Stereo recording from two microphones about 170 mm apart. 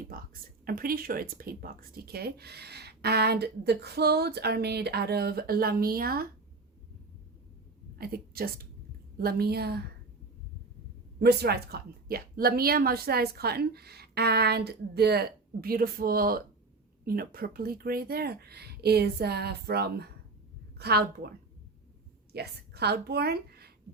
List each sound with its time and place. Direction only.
0.6 s speech: 60° right (ahead or behind)
7.9 s a woman's voice: 60° right (ahead or behind)
11.2 s a woman's voice: 70° right (ahead or behind)